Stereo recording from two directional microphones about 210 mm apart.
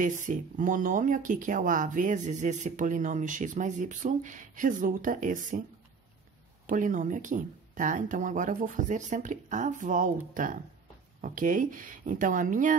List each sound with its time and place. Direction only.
0.0 s speech: 40° right (ahead or behind)
6.7 s speech: 40° right (ahead or behind)